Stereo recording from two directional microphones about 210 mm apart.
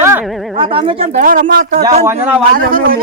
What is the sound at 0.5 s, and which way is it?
Speech, 25° right (ahead or behind).